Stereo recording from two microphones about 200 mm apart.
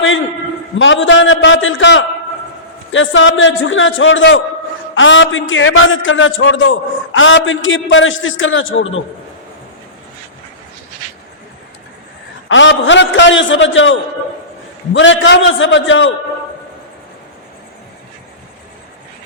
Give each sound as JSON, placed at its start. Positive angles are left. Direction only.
{"t": 0.8, "sound": "a man's voice", "side_deg": 70}
{"t": 12.5, "sound": "a man's voice", "side_deg": 70}